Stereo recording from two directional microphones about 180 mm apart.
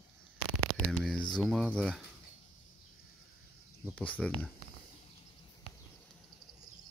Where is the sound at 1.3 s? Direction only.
Centre (ahead or behind).